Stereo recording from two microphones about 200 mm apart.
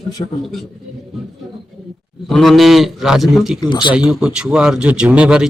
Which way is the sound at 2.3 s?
Centre (ahead or behind).